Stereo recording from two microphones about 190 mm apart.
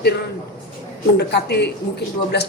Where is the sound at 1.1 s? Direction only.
60° left (ahead or behind).